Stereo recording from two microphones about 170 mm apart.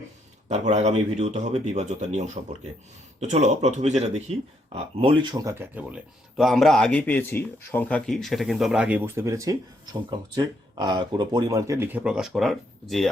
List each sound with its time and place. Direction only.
0.4 s speech: 40° right (ahead or behind)
5.3 s speech: 20° right (ahead or behind); by 13.1 s centre (ahead or behind)